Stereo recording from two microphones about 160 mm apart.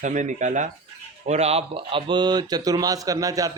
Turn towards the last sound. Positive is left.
turn(degrees=-20)  # may be behind; listen again after turning